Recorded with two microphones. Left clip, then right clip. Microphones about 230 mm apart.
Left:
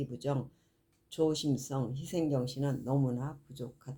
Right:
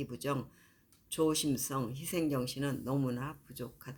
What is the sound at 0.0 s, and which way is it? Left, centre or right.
Speech, centre.